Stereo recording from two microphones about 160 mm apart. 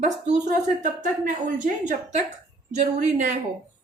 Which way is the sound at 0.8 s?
55° right (ahead or behind).